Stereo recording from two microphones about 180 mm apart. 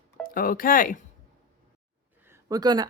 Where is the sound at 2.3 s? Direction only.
20° right (ahead or behind).